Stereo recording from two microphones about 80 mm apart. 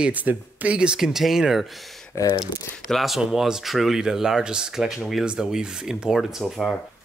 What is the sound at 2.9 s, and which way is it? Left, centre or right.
Speech, centre.